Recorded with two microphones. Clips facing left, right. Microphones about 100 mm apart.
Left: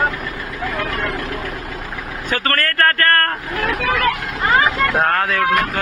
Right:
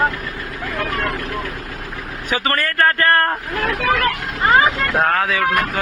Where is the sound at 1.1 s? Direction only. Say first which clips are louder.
Even; 90° left.